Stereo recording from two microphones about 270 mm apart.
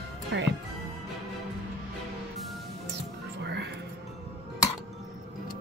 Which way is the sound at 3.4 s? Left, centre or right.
Right.